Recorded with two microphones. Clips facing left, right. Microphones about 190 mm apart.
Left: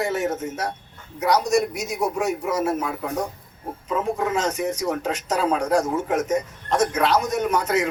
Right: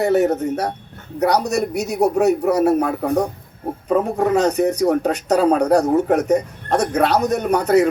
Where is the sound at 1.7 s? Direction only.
65° right (ahead or behind).